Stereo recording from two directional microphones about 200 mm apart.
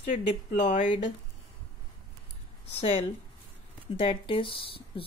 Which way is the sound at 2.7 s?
30° left (ahead or behind).